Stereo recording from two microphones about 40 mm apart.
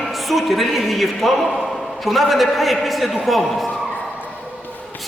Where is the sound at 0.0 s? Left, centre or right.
Centre.